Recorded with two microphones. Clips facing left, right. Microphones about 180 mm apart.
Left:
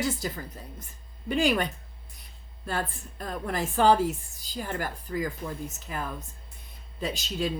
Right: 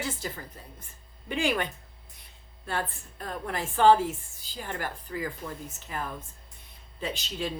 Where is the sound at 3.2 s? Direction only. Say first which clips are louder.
Left 3 dB; 40° left (ahead or behind).